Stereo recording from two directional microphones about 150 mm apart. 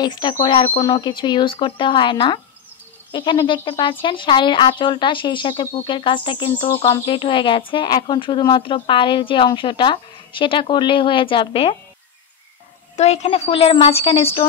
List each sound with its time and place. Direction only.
0.0 s speech: 30° left (ahead or behind)
12.9 s speech: 45° left (ahead or behind)